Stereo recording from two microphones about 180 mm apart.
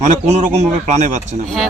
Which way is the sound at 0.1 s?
40° right (ahead or behind).